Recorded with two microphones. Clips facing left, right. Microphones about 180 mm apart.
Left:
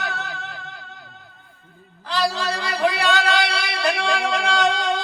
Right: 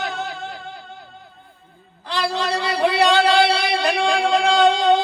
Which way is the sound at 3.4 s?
25° right (ahead or behind).